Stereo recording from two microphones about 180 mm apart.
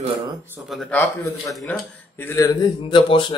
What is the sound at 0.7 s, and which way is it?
Speech, centre (ahead or behind).